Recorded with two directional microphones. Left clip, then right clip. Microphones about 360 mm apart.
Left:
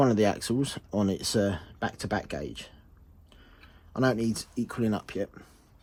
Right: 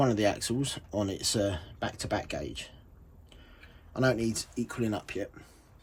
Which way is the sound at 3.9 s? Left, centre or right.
Centre.